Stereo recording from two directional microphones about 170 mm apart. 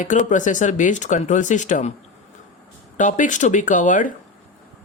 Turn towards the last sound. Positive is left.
turn(degrees=50)  # may be behind; listen again after turning